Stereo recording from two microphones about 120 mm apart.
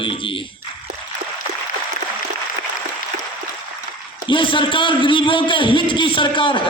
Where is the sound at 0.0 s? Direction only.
45° left (ahead or behind).